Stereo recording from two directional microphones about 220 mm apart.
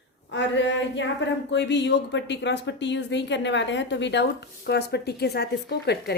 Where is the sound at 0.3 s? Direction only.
55° left (ahead or behind).